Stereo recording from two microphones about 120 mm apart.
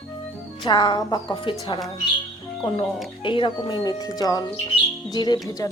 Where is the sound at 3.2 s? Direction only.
45° left (ahead or behind).